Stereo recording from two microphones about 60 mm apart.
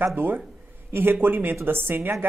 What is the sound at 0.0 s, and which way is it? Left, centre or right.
A woman's voice, right.